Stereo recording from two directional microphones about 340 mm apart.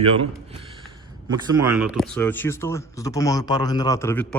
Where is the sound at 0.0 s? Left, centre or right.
Centre.